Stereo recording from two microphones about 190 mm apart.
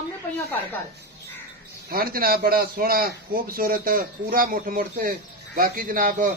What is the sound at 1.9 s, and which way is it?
A man's voice, 50° right (ahead or behind).